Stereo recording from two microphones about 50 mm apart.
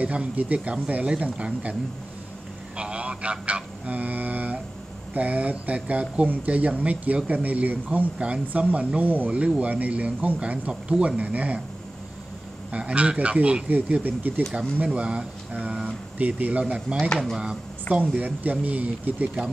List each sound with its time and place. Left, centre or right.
0.0 s speech: right
2.8 s a sound: right
5.1 s speech: right
12.7 s speech: right
14.9 s speech: right
18.1 s speech: right